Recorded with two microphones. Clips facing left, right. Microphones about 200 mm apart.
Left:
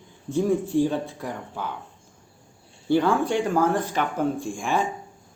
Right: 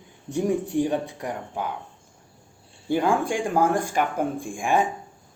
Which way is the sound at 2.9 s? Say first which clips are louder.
Left 2 dB; 10° right (ahead or behind).